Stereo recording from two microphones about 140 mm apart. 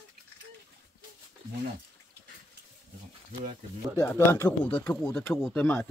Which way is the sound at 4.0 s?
15° left (ahead or behind).